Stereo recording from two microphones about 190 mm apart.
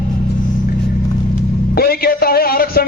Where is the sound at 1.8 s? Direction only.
55° left (ahead or behind).